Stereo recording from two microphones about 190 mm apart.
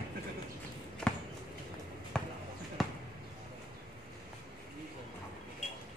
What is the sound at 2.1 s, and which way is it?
Basketball bounce, 5° left (ahead or behind).